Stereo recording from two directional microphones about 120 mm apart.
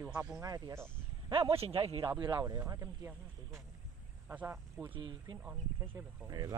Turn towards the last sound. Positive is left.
turn(degrees=-30)  # may be behind; listen again after turning